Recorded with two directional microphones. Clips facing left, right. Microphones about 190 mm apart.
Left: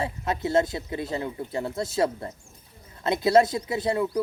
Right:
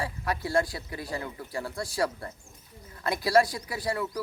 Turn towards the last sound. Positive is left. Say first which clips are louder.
# left 6 dB
turn(degrees=25)  # may be behind; listen again after turning